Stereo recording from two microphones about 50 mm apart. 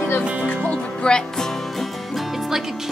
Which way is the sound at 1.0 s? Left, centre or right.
Centre.